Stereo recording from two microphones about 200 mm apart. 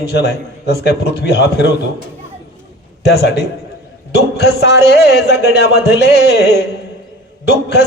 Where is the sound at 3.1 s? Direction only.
55° left (ahead or behind).